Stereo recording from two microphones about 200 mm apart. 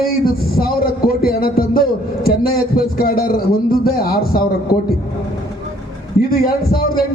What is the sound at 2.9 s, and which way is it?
A man's voice, 45° left (ahead or behind).